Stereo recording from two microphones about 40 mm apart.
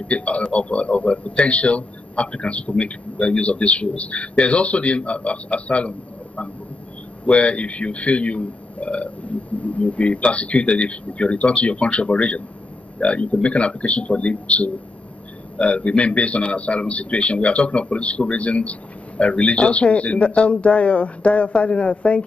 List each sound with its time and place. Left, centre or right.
0.0 s speech: left